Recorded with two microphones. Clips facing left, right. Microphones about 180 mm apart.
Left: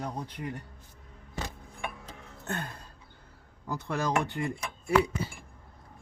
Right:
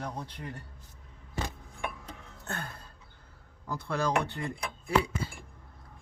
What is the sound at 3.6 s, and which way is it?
Speech, 15° left (ahead or behind).